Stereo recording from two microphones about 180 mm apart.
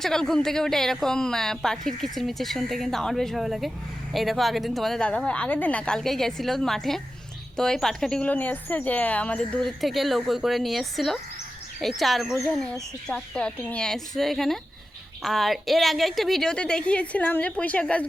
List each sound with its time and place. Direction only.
0.0 s speech: centre (ahead or behind)